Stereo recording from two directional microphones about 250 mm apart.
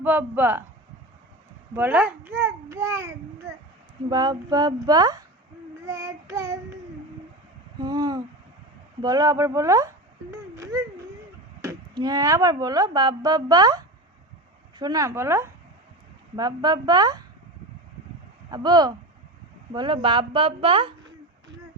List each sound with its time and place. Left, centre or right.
0.0 s speech: centre
1.7 s speech: centre
7.8 s speech: centre
18.5 s speech: centre